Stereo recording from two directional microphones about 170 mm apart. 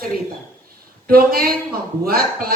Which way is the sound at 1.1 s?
60° right (ahead or behind).